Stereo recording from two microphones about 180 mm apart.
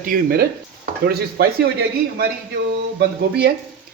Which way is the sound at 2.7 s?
70° right (ahead or behind).